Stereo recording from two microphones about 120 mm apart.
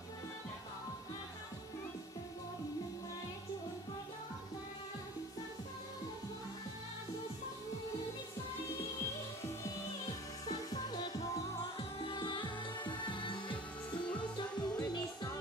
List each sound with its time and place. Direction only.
10.4 s music: 35° left (ahead or behind)